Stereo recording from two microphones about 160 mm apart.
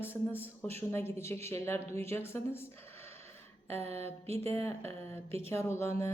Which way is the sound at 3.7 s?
40° right (ahead or behind).